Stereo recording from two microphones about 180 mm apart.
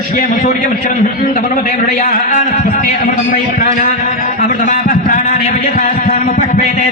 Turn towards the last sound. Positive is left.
turn(degrees=45)  # may be behind; listen again after turning